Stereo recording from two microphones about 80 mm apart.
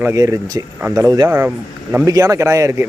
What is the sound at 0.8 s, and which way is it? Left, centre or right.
Speech, right.